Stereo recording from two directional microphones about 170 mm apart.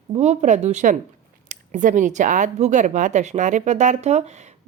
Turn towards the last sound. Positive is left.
turn(degrees=-40)  # may be behind; listen again after turning